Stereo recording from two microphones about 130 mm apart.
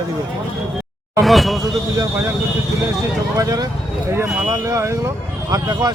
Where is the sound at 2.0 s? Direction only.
20° right (ahead or behind).